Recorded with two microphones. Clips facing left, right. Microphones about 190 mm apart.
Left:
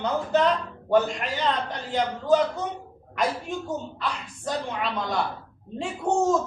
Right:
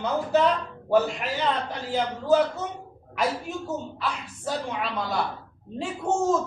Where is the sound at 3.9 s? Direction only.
5° right (ahead or behind).